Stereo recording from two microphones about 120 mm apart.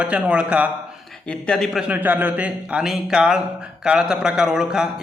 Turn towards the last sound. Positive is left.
turn(degrees=-5)  # may be behind; listen again after turning